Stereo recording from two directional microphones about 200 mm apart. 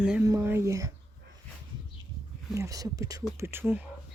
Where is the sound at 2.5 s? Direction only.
15° right (ahead or behind).